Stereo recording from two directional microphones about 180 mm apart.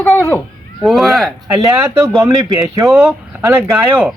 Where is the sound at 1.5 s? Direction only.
15° right (ahead or behind).